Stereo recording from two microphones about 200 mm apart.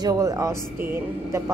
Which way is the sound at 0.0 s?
15° right (ahead or behind).